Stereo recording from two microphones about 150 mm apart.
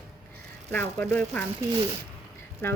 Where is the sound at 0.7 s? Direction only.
10° left (ahead or behind).